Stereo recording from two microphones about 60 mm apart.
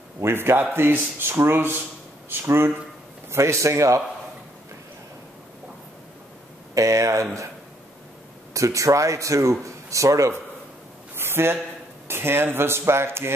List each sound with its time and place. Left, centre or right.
0.2 s speech: right
6.7 s speech: right
8.5 s speech: right
11.1 s a sound: right
12.1 s speech: right